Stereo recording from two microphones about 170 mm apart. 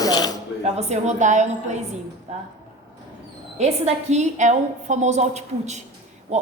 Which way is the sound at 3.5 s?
40° right (ahead or behind).